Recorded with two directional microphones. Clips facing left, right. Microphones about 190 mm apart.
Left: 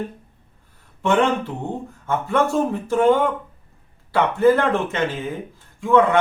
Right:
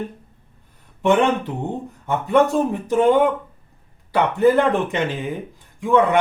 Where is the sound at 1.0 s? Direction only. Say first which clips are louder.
Right 2 dB; 15° right (ahead or behind).